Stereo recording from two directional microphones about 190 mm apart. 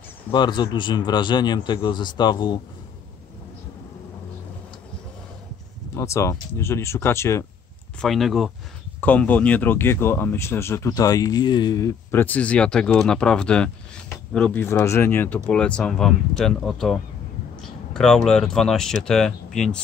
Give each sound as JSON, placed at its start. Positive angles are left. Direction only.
{"t": 0.3, "sound": "a man's voice", "side_deg": 25}
{"t": 5.9, "sound": "speech", "side_deg": 15}
{"t": 8.0, "sound": "speech", "side_deg": 0}